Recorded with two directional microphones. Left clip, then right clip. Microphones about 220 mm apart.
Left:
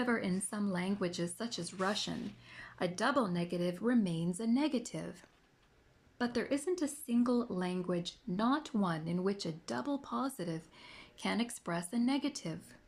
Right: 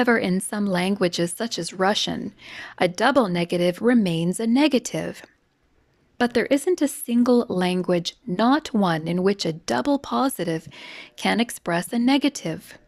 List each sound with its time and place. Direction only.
0.0 s speech: 40° right (ahead or behind)